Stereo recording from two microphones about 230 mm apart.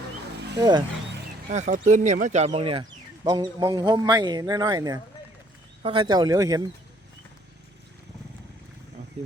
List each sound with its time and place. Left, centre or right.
0.6 s speech: centre
1.1 s music: right
1.9 s speech: right; by 6.6 s centre